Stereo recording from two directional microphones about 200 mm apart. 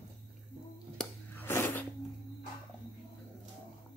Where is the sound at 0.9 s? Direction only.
10° left (ahead or behind).